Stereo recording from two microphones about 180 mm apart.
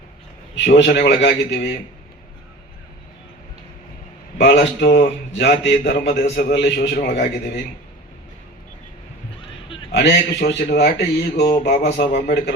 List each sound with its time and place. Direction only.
0.5 s speech: 70° left (ahead or behind)
4.4 s a man's voice: 70° left (ahead or behind)
9.9 s speech: 70° left (ahead or behind)